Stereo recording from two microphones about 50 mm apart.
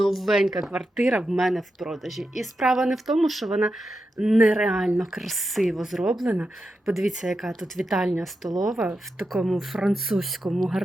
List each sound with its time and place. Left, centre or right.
0.0 s a woman's voice: centre
4.2 s a woman's voice: centre